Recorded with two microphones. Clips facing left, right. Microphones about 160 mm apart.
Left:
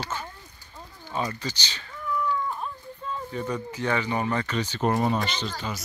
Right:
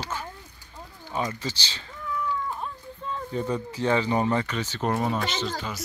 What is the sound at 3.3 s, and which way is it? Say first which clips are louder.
Speech: right 3 dB; 30° right (ahead or behind).